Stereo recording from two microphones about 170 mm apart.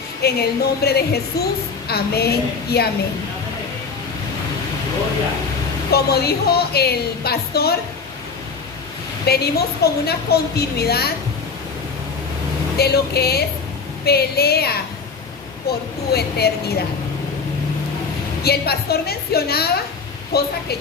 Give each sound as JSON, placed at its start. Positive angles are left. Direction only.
{"t": 0.2, "sound": "a woman's voice", "side_deg": 70}
{"t": 5.9, "sound": "a woman's voice", "side_deg": 70}
{"t": 9.2, "sound": "a woman's voice", "side_deg": 70}
{"t": 12.7, "sound": "a woman's voice", "side_deg": 70}
{"t": 16.1, "sound": "a woman's voice", "side_deg": 70}
{"t": 18.4, "sound": "a woman's voice", "side_deg": 70}